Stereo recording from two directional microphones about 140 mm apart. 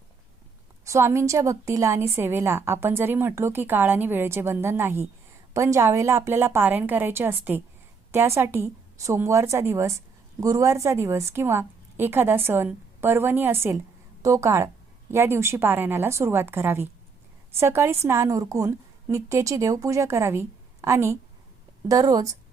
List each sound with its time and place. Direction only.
0.9 s a woman's voice: 20° right (ahead or behind)